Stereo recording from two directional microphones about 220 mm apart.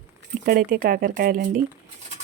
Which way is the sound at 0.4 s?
40° right (ahead or behind).